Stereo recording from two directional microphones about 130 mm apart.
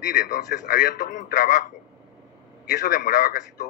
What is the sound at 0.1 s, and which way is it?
Speech, 75° left (ahead or behind).